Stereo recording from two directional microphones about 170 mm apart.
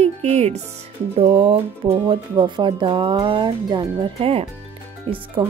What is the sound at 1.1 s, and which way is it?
Speech, 35° right (ahead or behind).